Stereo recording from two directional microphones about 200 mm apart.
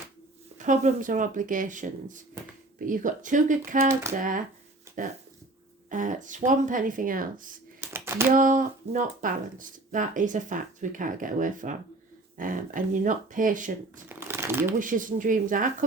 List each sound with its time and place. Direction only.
0.6 s speech: 40° right (ahead or behind)
5.9 s speech: 40° right (ahead or behind)
7.8 s a sound: 10° right (ahead or behind)
8.4 s speech: 40° right (ahead or behind)
14.1 s crumpling: 10° right (ahead or behind)
14.8 s speech: 40° right (ahead or behind)